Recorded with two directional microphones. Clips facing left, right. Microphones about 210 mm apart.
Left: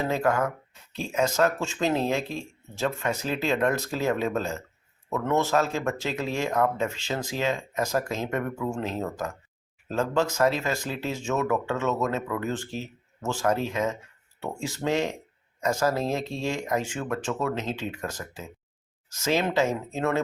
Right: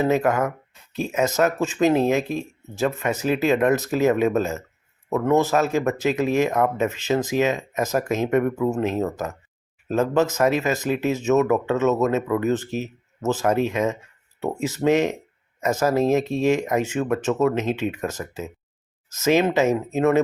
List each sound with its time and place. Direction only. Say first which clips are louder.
0.0 s speech: right 5 dB; 20° right (ahead or behind)